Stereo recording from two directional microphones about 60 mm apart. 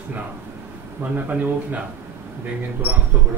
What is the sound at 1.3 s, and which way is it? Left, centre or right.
Speech, right.